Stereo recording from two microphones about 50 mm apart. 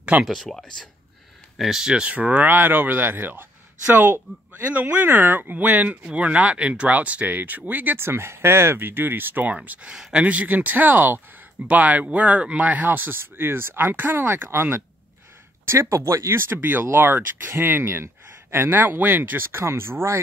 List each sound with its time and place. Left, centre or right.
0.3 s speech: centre
1.6 s speech: centre
2.1 s speech: right
8.0 s speech: right
14.5 s speech: right
15.9 s speech: right
16.9 s speech: right
19.6 s speech: right